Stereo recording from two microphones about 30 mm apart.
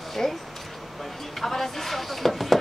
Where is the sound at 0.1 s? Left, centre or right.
Centre.